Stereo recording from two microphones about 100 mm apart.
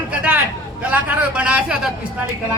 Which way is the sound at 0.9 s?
15° right (ahead or behind).